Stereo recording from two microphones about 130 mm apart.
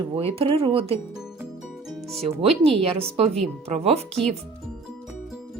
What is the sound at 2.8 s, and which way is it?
Speech, 50° right (ahead or behind).